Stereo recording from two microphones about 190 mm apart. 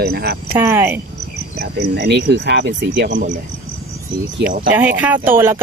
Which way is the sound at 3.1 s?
40° right (ahead or behind).